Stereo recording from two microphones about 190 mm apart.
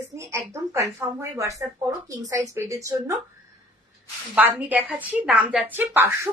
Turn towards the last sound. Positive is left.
turn(degrees=-10)  # may be behind; listen again after turning